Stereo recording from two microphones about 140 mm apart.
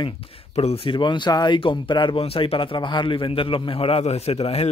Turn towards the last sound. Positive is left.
turn(degrees=45)  # may be behind; listen again after turning